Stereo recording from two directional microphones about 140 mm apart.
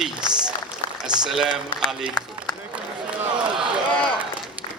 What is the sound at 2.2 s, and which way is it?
Run, 30° left (ahead or behind).